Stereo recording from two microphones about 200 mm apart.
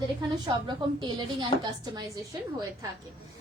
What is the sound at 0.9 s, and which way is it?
Speech, 20° right (ahead or behind).